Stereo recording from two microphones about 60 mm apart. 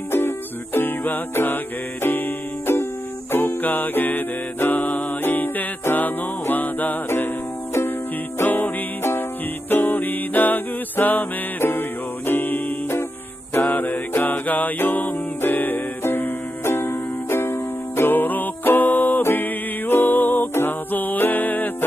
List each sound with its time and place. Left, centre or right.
0.7 s music: left
8.4 s music: left